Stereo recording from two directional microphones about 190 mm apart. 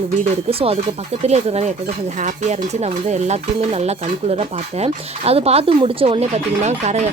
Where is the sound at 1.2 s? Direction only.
35° right (ahead or behind).